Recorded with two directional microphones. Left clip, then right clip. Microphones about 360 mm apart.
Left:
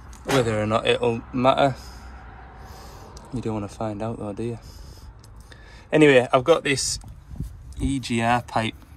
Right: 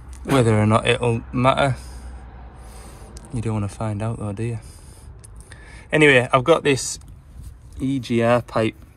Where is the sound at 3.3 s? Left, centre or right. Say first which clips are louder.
Right 1 dB; centre.